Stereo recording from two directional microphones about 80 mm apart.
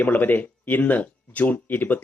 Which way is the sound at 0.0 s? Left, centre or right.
Left.